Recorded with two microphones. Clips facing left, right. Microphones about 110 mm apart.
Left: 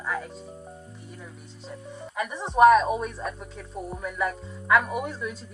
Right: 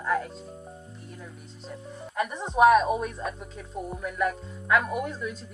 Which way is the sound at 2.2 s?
Centre (ahead or behind).